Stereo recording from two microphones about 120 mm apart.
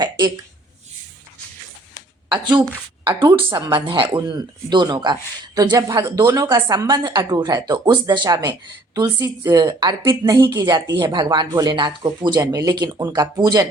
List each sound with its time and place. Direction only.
2.3 s speech: 40° right (ahead or behind)